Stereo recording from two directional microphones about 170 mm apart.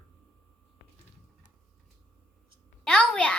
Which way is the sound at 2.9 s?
5° left (ahead or behind).